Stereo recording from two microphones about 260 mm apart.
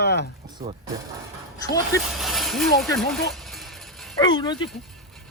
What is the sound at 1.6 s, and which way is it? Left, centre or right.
Speech, centre.